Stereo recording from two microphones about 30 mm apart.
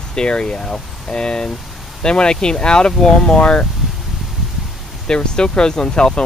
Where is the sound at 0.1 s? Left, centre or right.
Left.